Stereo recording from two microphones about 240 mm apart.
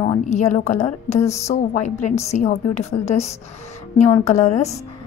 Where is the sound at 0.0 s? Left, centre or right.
Left.